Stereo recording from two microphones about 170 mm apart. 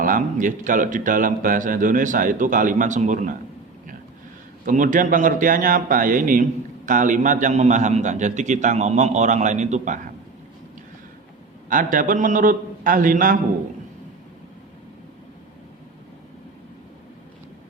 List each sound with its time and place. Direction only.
0.0 s speech: 50° right (ahead or behind)
4.6 s speech: 50° right (ahead or behind)
11.7 s speech: 50° right (ahead or behind)